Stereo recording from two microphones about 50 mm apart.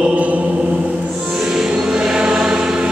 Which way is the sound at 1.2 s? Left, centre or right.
Centre.